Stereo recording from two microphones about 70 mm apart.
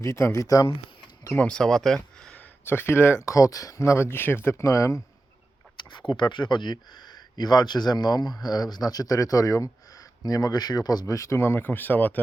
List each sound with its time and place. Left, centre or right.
0.0 s speech: left
0.4 s speech: left
1.5 s speech: centre
2.6 s speech: left
3.2 s speech: left
5.9 s speech: left
11.0 s speech: left